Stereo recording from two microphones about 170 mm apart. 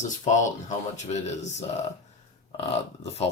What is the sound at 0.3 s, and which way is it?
Speech, 45° left (ahead or behind).